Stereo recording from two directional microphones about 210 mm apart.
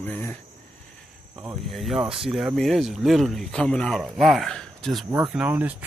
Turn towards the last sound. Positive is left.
turn(degrees=-5)  # may be behind; listen again after turning